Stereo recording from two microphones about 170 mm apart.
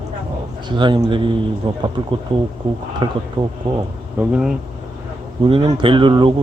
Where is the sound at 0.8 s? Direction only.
30° right (ahead or behind).